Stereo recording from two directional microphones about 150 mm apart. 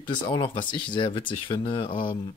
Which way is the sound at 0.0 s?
35° left (ahead or behind).